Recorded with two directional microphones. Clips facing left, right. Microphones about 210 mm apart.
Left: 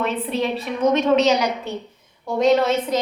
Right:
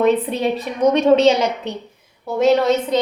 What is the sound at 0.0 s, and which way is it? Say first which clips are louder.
A woman's voice: right 6 dB; 40° right (ahead or behind).